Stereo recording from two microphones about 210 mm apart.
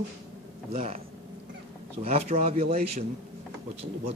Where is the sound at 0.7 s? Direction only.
30° right (ahead or behind).